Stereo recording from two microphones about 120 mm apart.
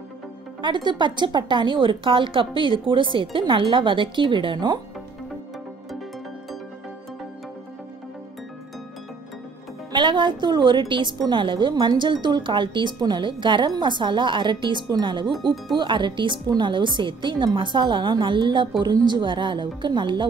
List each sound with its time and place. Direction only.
0.6 s speech: 40° right (ahead or behind)
9.9 s a woman's voice: 40° right (ahead or behind)